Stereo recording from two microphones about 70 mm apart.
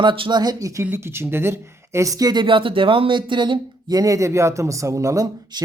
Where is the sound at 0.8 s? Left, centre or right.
Right.